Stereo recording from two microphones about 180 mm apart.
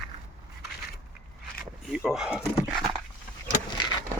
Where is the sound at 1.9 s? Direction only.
5° right (ahead or behind).